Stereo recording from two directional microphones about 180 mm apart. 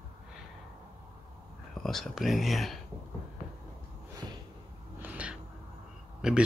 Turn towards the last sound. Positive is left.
turn(degrees=-5)  # may be behind; listen again after turning